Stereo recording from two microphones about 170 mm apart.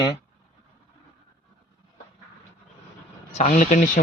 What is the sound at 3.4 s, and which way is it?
Speech, 50° left (ahead or behind).